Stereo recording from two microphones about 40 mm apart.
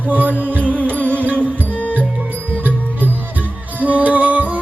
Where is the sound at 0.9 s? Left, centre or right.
Left.